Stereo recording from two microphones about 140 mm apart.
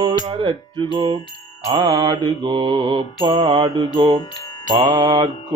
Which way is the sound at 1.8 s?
30° right (ahead or behind).